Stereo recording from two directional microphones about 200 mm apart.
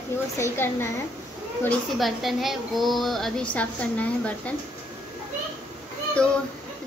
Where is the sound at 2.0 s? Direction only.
Centre (ahead or behind).